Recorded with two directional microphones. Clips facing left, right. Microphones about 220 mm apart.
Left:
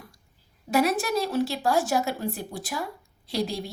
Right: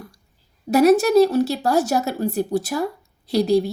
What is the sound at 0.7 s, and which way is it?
Speech, 40° right (ahead or behind).